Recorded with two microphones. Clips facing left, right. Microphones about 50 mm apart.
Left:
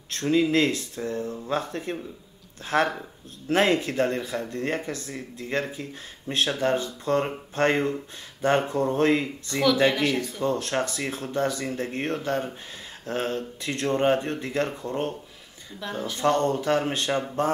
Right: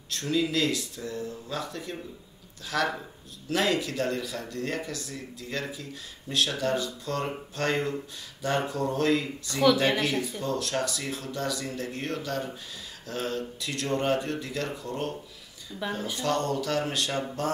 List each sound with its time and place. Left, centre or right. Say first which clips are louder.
0.1 s speech: left 5 dB; left
15.8 s speech: right 1 dB; centre
16.2 s speech: left 6 dB; left